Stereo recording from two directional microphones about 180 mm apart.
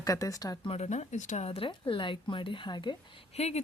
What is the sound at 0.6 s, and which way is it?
Speech, 35° left (ahead or behind).